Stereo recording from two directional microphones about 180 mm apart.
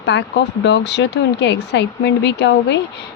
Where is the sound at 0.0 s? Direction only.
75° left (ahead or behind).